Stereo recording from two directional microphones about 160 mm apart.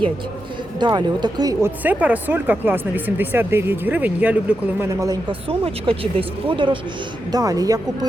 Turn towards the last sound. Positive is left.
turn(degrees=-20)  # may be behind; listen again after turning